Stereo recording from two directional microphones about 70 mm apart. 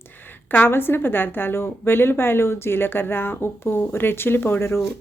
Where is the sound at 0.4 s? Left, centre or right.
Left.